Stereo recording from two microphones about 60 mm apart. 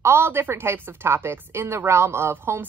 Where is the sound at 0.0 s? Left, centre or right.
Right.